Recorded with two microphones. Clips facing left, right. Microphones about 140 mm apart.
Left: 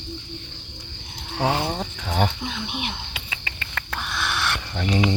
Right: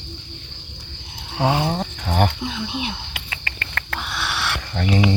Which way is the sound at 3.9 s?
10° right (ahead or behind).